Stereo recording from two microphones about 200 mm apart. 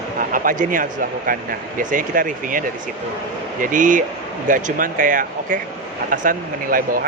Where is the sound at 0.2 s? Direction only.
45° right (ahead or behind).